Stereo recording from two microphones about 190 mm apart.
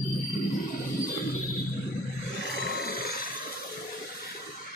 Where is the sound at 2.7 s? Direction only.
50° left (ahead or behind).